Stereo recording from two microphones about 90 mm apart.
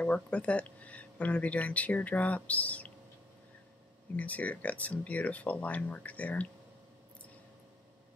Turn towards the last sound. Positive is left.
turn(degrees=15)  # may be behind; listen again after turning